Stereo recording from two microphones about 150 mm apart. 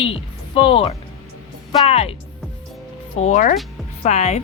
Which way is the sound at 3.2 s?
55° left (ahead or behind).